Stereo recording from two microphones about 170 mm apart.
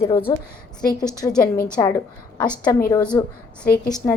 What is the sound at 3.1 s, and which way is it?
Speech, 15° left (ahead or behind).